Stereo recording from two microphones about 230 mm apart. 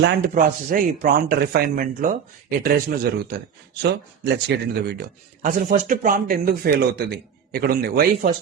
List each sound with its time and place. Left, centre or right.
0.0 s speech: right